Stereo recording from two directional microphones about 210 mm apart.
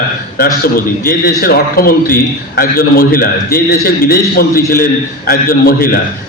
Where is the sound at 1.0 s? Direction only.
45° left (ahead or behind).